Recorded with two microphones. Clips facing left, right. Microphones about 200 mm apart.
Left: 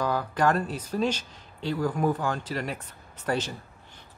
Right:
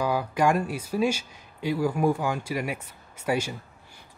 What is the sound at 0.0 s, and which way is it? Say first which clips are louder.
Speech: right 1 dB; 10° right (ahead or behind).